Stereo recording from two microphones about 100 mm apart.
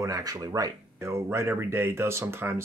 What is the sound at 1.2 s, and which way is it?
Speech, 25° right (ahead or behind).